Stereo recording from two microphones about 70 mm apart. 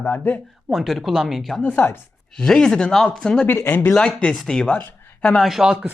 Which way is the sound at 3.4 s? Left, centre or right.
Left.